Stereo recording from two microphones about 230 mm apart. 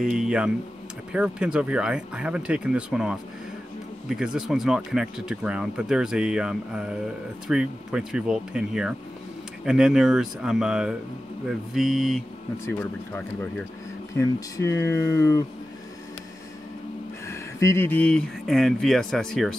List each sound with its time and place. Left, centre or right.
0.0 s speech: centre
17.3 s speech: centre